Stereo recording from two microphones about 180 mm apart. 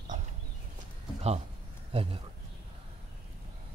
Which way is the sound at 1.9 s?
30° right (ahead or behind).